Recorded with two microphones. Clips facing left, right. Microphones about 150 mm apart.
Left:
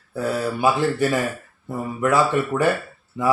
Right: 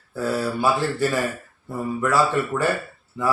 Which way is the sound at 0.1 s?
20° left (ahead or behind).